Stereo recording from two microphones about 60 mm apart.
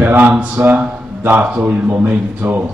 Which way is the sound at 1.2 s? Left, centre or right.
Right.